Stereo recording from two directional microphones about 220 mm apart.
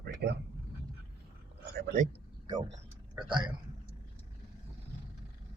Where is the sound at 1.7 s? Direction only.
40° right (ahead or behind).